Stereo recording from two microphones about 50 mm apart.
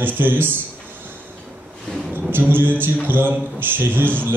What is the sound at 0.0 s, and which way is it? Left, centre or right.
Speech, right.